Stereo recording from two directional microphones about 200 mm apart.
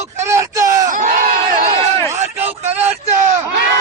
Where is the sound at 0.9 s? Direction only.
35° right (ahead or behind).